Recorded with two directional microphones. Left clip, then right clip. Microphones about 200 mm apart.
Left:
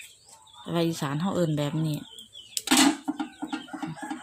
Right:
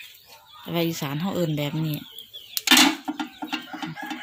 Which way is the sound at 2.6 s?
20° right (ahead or behind).